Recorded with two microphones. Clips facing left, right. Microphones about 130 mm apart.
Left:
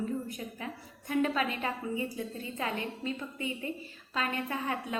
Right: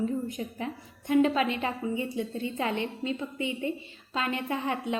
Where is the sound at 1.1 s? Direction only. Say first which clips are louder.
Right 6 dB; 25° right (ahead or behind).